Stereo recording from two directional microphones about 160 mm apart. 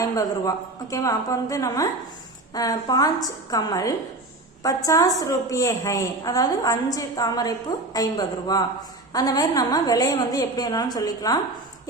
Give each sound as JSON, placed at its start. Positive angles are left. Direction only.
{"t": 0.0, "sound": "a woman's voice", "side_deg": 20}